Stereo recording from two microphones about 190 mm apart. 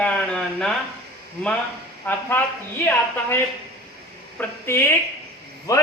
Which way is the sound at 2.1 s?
10° left (ahead or behind).